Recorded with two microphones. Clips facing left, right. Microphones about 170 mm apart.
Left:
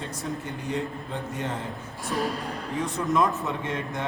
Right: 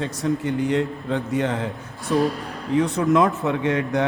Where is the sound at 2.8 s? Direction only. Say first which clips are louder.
Right 6 dB; 75° right (ahead or behind).